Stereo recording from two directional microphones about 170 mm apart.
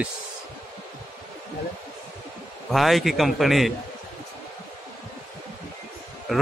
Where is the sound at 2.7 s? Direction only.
Centre (ahead or behind).